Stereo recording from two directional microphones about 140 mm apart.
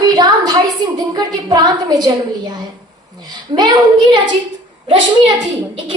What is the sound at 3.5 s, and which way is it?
Speech, 30° right (ahead or behind).